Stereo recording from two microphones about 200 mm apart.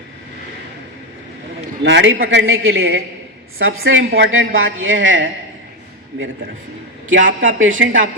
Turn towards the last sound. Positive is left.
turn(degrees=-80)